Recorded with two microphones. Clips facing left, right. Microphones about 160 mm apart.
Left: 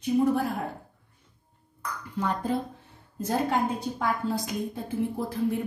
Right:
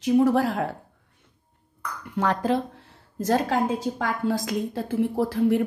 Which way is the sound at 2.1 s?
90° right.